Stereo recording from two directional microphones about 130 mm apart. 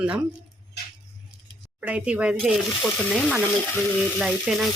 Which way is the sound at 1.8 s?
10° right (ahead or behind).